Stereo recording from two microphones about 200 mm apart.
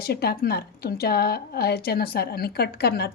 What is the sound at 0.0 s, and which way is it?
A woman's voice, 50° left (ahead or behind).